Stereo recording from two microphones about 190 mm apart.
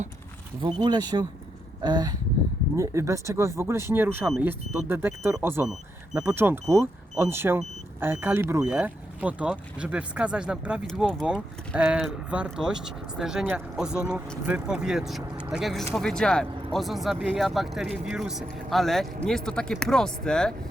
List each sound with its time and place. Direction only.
0.6 s speech: 20° right (ahead or behind); by 20.5 s 5° left (ahead or behind)